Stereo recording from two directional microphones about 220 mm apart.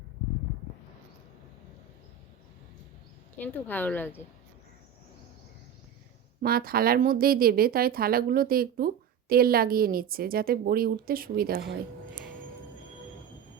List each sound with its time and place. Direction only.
3.3 s speech: 10° left (ahead or behind)
6.4 s a woman's voice: 45° right (ahead or behind)